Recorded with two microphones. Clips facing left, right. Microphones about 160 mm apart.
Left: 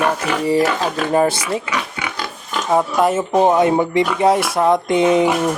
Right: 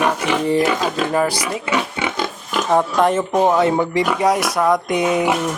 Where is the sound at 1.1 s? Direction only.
25° left (ahead or behind).